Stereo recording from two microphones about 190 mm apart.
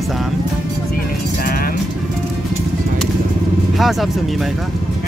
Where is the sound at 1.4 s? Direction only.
50° left (ahead or behind).